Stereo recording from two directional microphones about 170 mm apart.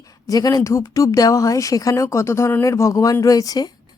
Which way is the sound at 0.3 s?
20° left (ahead or behind).